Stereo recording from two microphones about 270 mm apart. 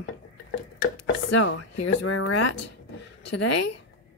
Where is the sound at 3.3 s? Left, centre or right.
Left.